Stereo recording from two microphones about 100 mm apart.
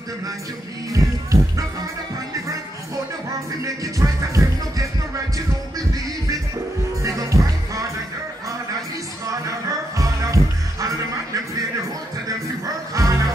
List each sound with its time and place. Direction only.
0.9 s music: 30° right (ahead or behind)
3.6 s music: 35° right (ahead or behind)
7.0 s music: 30° right (ahead or behind)
9.9 s music: 35° right (ahead or behind)
12.3 s music: 35° right (ahead or behind)